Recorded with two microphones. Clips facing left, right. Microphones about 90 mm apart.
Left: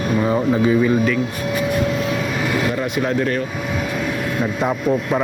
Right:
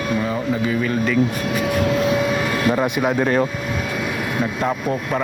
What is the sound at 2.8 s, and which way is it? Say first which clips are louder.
Speech: right 1 dB; 20° right (ahead or behind).